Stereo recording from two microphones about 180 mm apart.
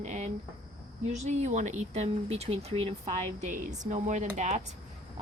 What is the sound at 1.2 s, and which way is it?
Speech, 40° right (ahead or behind).